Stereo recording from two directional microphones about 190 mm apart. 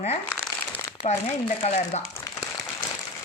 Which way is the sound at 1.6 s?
35° left (ahead or behind).